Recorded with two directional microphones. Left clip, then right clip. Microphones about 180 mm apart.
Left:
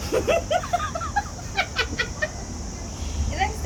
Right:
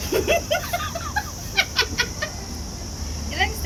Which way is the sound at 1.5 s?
20° left (ahead or behind).